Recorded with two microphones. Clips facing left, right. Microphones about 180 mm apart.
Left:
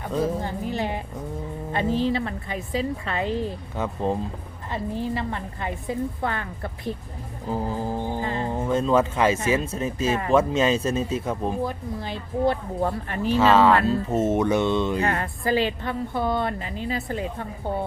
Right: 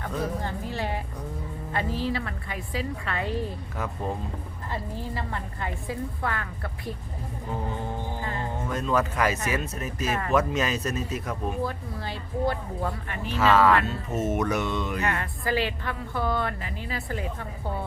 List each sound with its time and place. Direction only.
0.4 s speech: 15° left (ahead or behind)
11.6 s speech: 15° left (ahead or behind)
12.8 s speech: 35° left (ahead or behind)